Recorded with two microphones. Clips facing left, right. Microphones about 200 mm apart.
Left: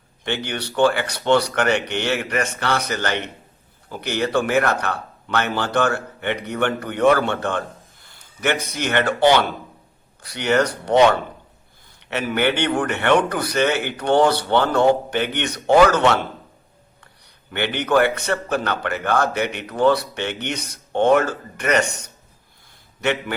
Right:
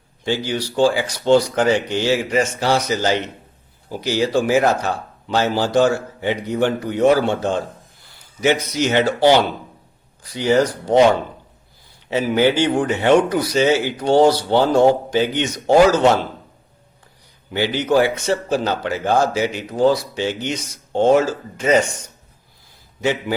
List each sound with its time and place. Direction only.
0.3 s a man's voice: 65° left (ahead or behind)
8.6 s a man's voice: 55° left (ahead or behind)
10.2 s speech: 70° left (ahead or behind)
12.4 s a man's voice: 65° left (ahead or behind)
17.5 s a man's voice: 60° left (ahead or behind)